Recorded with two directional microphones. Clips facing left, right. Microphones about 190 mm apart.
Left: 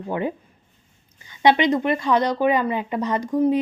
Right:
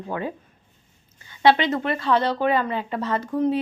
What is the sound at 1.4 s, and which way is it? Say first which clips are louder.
A woman's voice: left 1 dB; 15° left (ahead or behind).